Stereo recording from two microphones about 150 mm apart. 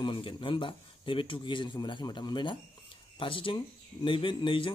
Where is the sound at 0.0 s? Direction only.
35° left (ahead or behind).